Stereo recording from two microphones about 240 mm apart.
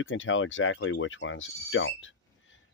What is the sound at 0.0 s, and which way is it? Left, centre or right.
Speech, left.